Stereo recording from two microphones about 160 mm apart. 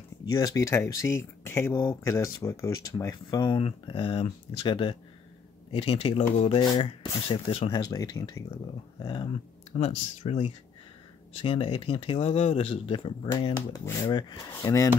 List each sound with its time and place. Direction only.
0.2 s speech: 25° left (ahead or behind)
7.8 s speech: 25° left (ahead or behind); by 10.4 s 40° left (ahead or behind)
11.4 s speech: 35° left (ahead or behind)
14.6 s speech: 20° left (ahead or behind)